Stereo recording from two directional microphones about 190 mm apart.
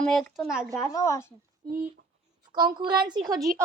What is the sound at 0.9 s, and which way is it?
Speech, 15° left (ahead or behind).